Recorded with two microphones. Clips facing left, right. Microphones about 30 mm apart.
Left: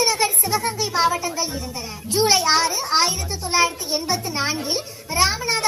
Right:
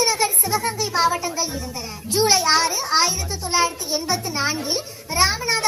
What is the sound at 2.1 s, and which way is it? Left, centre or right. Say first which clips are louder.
A child's voice: even; centre.